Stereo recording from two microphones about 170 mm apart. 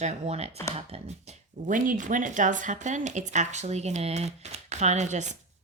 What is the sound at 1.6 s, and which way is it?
Speech, 50° right (ahead or behind).